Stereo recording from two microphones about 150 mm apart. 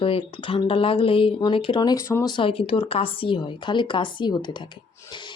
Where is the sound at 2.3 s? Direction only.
35° left (ahead or behind).